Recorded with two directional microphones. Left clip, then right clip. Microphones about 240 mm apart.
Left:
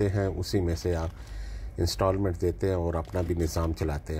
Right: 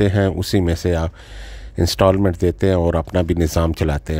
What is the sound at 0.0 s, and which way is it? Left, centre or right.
Speech, right.